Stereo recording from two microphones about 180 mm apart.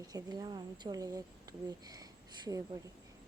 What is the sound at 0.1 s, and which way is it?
Speech, 20° right (ahead or behind).